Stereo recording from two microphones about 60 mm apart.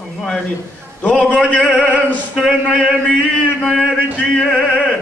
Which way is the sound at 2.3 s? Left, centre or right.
Centre.